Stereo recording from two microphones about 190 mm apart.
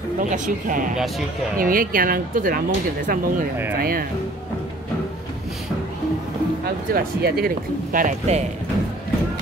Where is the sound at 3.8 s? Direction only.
50° right (ahead or behind).